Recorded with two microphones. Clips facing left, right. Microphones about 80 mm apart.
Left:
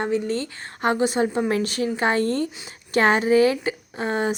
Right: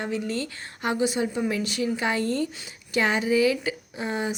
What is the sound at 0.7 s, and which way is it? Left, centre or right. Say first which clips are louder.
A woman's voice: left 4 dB; left.